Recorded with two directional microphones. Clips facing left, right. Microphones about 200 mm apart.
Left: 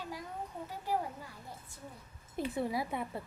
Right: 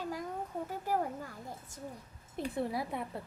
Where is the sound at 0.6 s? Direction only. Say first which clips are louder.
Even; 50° right (ahead or behind).